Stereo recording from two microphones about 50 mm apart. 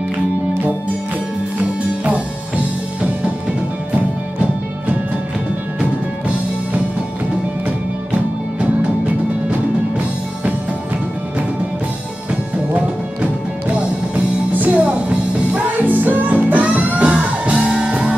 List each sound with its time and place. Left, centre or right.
1.6 s music: right
9.5 s music: right
12.3 s music: right
17.6 s music: centre